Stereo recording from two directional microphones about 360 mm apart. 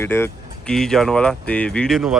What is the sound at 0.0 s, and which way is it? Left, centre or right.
Speech, centre.